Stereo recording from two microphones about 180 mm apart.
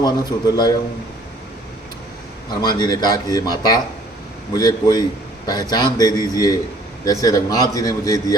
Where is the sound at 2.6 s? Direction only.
25° left (ahead or behind).